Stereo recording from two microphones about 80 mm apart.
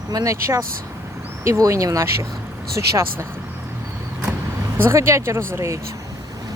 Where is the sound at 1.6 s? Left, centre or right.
Right.